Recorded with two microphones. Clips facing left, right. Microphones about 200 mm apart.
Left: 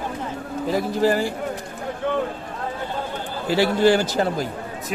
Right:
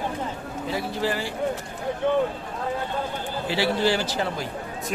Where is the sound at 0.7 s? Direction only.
45° left (ahead or behind).